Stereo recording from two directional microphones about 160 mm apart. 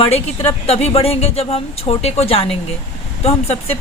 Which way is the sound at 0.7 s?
40° left (ahead or behind).